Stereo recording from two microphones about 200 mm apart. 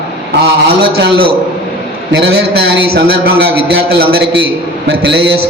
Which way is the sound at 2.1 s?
60° right (ahead or behind).